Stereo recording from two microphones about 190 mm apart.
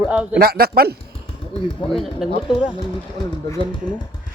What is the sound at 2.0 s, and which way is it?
Speech, centre (ahead or behind).